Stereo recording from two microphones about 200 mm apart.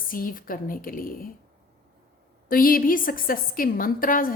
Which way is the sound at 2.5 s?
45° left (ahead or behind).